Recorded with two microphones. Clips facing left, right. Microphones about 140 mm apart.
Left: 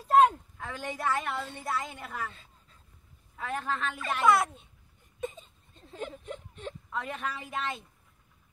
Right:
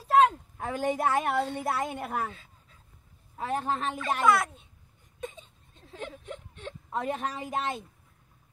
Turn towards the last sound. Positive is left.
turn(degrees=-40)  # may be behind; listen again after turning